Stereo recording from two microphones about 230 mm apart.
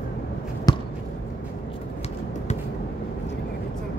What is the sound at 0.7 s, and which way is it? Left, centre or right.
Basketball bounce, centre.